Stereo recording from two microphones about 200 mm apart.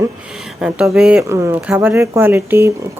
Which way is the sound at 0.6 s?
5° right (ahead or behind).